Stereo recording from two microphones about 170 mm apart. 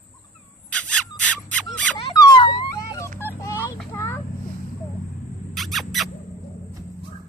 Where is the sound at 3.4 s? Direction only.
15° left (ahead or behind).